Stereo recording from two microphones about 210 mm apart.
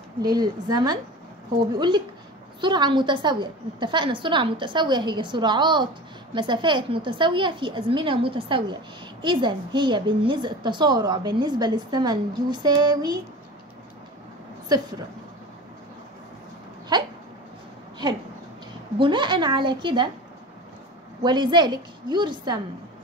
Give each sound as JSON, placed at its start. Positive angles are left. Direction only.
{"t": 0.2, "sound": "a woman's voice", "side_deg": -20}
{"t": 14.7, "sound": "a woman's voice", "side_deg": -20}
{"t": 16.9, "sound": "dog", "side_deg": -20}
{"t": 18.9, "sound": "a woman's voice", "side_deg": -25}
{"t": 21.2, "sound": "a woman's voice", "side_deg": -20}